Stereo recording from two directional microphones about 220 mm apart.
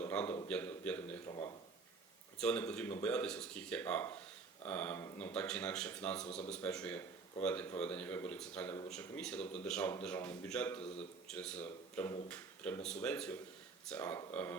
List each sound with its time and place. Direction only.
0.0 s a sound: 5° left (ahead or behind)
0.4 s a man's voice: 5° left (ahead or behind)
1.3 s speech: 20° left (ahead or behind)
2.4 s a man's voice: 5° left (ahead or behind)